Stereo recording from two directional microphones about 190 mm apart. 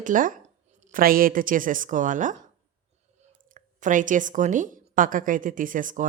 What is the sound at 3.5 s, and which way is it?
Speech, 45° right (ahead or behind).